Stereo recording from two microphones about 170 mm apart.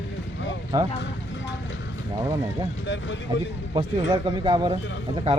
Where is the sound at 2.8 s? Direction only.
90° left.